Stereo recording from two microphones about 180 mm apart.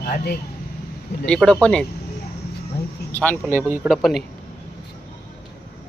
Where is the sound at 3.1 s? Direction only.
10° left (ahead or behind).